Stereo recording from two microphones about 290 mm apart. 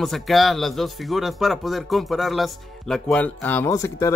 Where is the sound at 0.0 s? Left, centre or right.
Centre.